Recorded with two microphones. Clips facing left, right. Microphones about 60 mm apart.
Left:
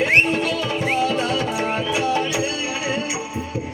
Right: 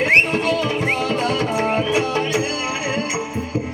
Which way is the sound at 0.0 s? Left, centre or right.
Right.